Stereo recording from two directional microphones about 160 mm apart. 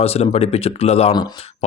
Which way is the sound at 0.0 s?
40° left (ahead or behind).